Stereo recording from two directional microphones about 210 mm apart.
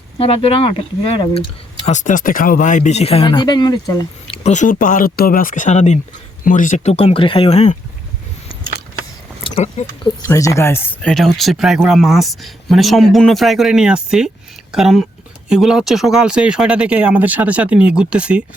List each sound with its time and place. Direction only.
0.4 s speech: 25° left (ahead or behind)
4.4 s speech: 35° left (ahead or behind)
9.4 s speech: 25° left (ahead or behind); by 18.4 s 5° right (ahead or behind)